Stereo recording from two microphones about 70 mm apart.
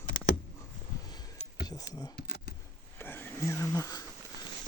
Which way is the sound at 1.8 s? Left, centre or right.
Left.